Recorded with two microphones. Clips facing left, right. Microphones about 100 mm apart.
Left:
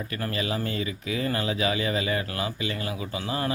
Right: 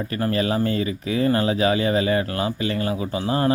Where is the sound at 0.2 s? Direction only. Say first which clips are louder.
Right 8 dB; 40° right (ahead or behind).